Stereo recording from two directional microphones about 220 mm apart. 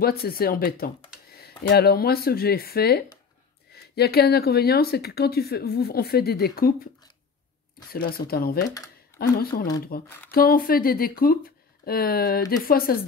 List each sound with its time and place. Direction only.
0.0 s speech: 45° left (ahead or behind)
7.9 s speech: 40° left (ahead or behind)
8.7 s a sound: 15° left (ahead or behind)
9.4 s speech: 45° left (ahead or behind)
10.0 s speech: 10° left (ahead or behind)
10.3 s speech: 40° left (ahead or behind)